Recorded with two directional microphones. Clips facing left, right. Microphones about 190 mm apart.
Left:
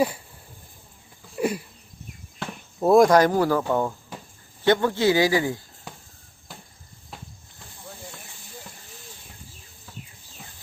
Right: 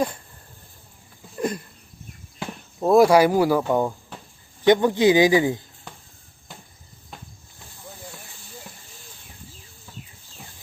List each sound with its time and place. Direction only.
1.4 s a sound: 10° left (ahead or behind)
2.8 s speech: 5° right (ahead or behind); by 5.6 s 20° right (ahead or behind)
7.1 s cricket: centre (ahead or behind)